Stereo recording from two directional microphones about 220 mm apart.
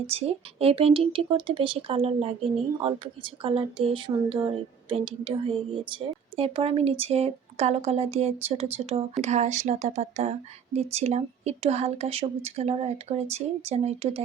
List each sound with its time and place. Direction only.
0.1 s speech: 25° right (ahead or behind)